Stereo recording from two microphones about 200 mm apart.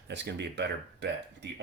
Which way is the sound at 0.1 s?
60° right (ahead or behind).